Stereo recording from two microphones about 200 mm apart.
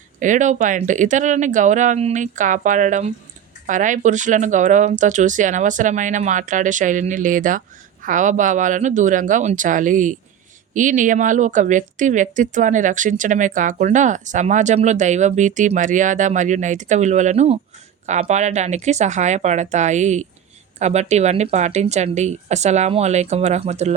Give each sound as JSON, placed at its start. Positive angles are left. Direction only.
{"t": 0.2, "sound": "a woman's voice", "side_deg": -40}